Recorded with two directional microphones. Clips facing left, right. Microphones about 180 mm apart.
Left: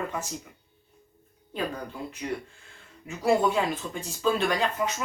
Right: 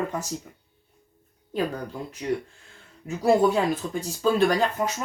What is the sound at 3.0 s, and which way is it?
Speech, 40° right (ahead or behind).